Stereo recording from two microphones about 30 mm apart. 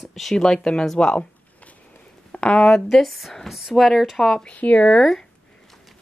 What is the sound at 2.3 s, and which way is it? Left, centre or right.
Speech, left.